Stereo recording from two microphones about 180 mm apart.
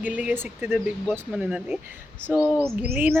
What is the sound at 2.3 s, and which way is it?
Speech, 15° left (ahead or behind).